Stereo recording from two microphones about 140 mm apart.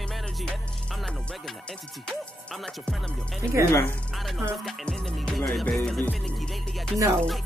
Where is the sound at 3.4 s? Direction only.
15° right (ahead or behind).